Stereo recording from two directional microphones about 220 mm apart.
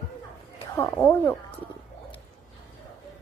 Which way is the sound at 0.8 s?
10° left (ahead or behind).